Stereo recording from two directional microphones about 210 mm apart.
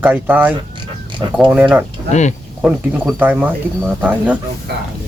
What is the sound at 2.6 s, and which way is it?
Speech, 5° right (ahead or behind).